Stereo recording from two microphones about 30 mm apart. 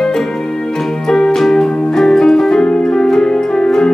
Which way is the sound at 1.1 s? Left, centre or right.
Centre.